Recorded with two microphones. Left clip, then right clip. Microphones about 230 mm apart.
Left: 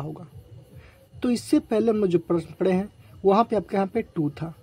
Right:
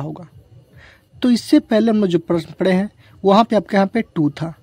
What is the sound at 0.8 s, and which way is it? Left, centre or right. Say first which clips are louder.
Speech: right 8 dB; right.